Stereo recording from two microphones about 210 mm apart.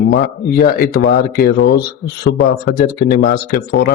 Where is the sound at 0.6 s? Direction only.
45° left (ahead or behind).